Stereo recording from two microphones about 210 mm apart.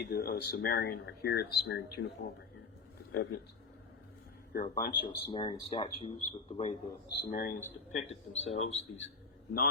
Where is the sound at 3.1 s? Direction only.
55° left (ahead or behind).